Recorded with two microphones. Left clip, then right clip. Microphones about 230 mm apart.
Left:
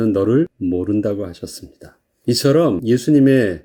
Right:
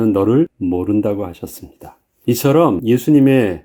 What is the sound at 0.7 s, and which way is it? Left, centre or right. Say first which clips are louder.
Speech: right 2 dB; centre.